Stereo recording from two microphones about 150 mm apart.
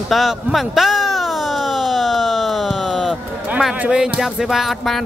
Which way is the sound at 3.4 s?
10° right (ahead or behind).